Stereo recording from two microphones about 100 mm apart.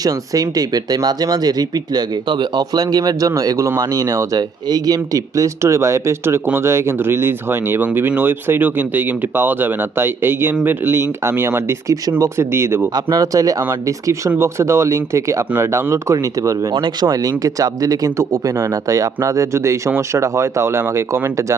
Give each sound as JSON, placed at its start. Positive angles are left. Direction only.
{"t": 0.0, "sound": "speech", "side_deg": -40}
{"t": 12.9, "sound": "speech", "side_deg": -40}
{"t": 16.7, "sound": "speech", "side_deg": -55}
{"t": 17.1, "sound": "speech", "side_deg": -35}